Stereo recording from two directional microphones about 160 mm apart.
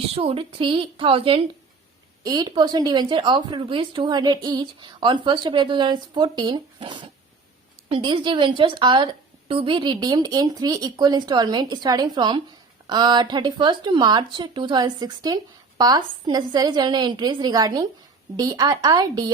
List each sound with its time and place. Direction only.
0.1 s a woman's voice: 35° right (ahead or behind)